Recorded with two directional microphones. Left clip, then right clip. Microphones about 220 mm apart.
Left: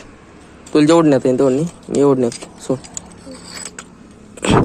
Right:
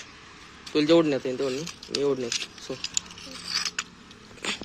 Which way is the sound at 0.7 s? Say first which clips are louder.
Left 10 dB; 30° left (ahead or behind).